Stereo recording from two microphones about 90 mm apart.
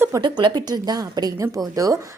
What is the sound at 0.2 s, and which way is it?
A woman's voice, 55° right (ahead or behind).